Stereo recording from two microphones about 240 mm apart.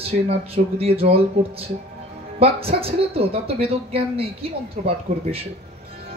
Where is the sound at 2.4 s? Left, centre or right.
Right.